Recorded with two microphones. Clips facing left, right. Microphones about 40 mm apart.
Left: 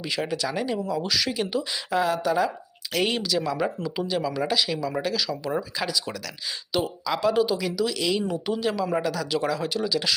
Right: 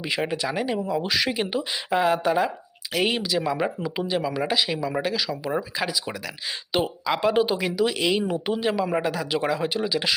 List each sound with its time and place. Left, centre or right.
0.1 s speech: right
2.9 s speech: centre
6.7 s speech: right